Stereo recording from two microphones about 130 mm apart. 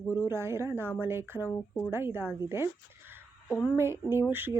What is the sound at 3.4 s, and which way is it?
Speech, 20° left (ahead or behind).